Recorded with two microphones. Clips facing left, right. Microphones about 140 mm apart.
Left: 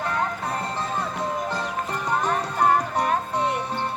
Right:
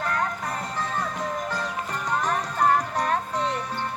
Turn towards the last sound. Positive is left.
turn(degrees=5)  # may be behind; listen again after turning